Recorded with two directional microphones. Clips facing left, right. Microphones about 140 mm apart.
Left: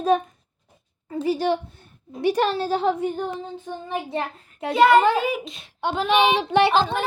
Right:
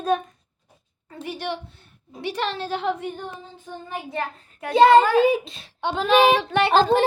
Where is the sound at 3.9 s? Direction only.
25° left (ahead or behind).